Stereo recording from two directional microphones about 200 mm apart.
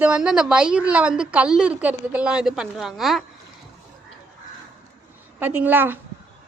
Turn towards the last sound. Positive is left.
turn(degrees=-10)  # may be behind; listen again after turning